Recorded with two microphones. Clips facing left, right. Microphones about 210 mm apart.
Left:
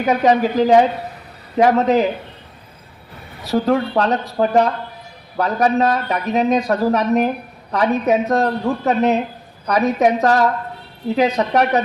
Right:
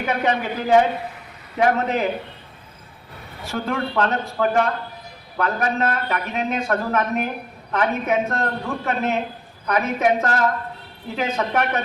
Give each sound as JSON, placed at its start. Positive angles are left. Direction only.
{"t": 0.0, "sound": "speech", "side_deg": 40}
{"t": 3.4, "sound": "speech", "side_deg": 40}